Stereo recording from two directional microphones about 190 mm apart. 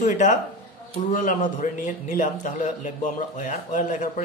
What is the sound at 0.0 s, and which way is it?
A man's voice, 40° left (ahead or behind).